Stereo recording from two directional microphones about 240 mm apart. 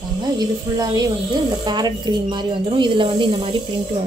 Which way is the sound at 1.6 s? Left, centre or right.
Centre.